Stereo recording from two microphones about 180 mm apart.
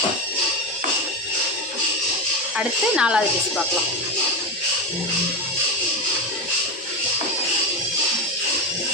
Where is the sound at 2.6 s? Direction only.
5° right (ahead or behind).